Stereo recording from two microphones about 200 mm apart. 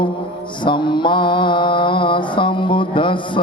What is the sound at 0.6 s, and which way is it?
Mantra, 25° left (ahead or behind).